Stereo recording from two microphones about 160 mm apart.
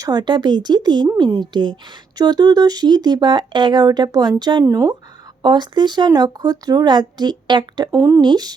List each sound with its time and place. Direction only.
0.0 s speech: 25° right (ahead or behind)